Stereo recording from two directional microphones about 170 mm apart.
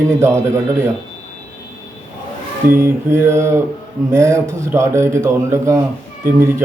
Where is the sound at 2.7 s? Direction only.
15° right (ahead or behind).